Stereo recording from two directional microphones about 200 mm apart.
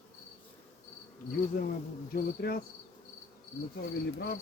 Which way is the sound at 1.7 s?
50° left (ahead or behind).